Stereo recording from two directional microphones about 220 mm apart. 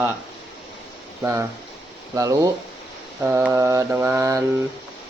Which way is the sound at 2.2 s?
15° right (ahead or behind).